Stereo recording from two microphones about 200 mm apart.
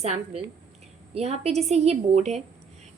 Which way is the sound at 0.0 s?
30° right (ahead or behind).